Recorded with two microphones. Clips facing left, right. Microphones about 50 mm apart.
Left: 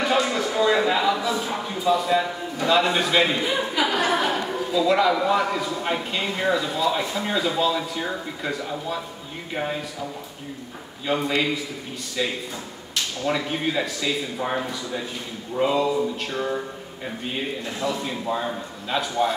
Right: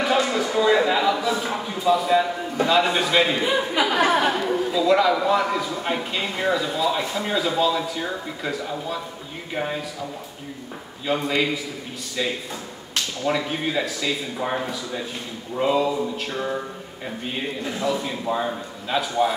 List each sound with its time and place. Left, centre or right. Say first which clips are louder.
0.0 s speech: right 1 dB; centre
4.0 s a woman's voice: right 6 dB; right
4.4 s speech: right 2 dB; centre
11.1 s speech: even; centre